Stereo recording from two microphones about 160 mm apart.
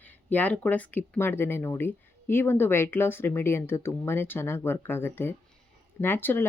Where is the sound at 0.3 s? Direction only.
10° left (ahead or behind).